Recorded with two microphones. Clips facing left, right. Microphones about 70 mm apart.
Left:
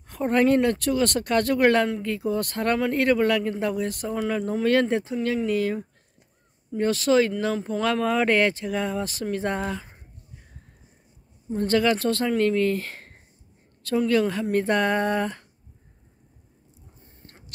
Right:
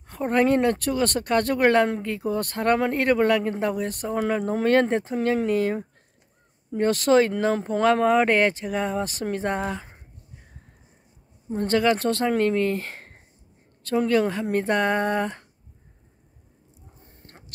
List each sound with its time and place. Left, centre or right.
0.2 s speech: centre
6.7 s speech: right
7.5 s speech: right
7.8 s speech: right
11.4 s speech: right